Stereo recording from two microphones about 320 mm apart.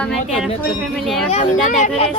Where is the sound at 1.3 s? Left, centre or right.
Left.